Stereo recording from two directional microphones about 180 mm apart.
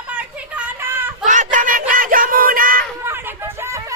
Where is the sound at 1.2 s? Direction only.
45° right (ahead or behind).